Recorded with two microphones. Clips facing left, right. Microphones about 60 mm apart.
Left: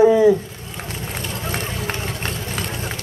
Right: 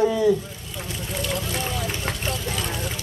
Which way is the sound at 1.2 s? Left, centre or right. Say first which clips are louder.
Right 1 dB; left.